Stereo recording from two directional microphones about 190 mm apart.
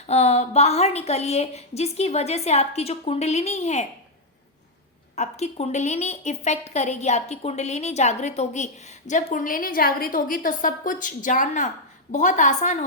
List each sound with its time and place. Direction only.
0.1 s a woman's voice: 35° left (ahead or behind)
5.1 s a woman's voice: 35° left (ahead or behind)